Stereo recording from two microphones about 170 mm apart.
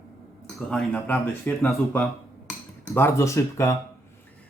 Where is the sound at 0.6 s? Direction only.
Centre (ahead or behind).